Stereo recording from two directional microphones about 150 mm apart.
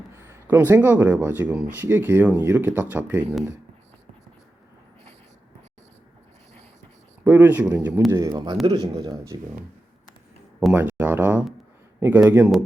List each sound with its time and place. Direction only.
0.2 s speech: 15° right (ahead or behind)
7.3 s speech: 10° right (ahead or behind)
8.1 s a man's voice: 25° right (ahead or behind)
10.8 s a sound: 15° right (ahead or behind)
11.9 s speech: 10° right (ahead or behind)